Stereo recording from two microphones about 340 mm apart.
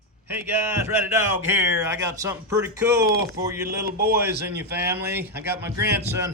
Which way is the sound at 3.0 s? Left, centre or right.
Right.